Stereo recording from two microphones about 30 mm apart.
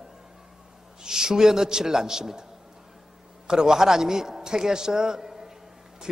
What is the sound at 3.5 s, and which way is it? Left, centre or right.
A man's voice, centre.